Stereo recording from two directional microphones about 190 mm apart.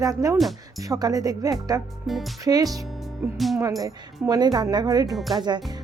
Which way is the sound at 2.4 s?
20° right (ahead or behind).